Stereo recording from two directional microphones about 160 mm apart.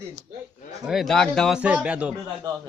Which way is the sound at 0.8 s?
Centre (ahead or behind).